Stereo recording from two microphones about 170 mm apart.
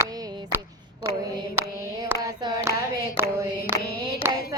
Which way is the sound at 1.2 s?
15° right (ahead or behind).